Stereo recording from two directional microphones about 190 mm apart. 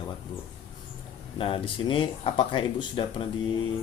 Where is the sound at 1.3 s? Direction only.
30° left (ahead or behind).